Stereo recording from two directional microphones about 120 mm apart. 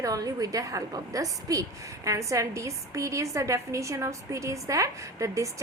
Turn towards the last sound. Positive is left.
turn(degrees=-25)  # may be behind; listen again after turning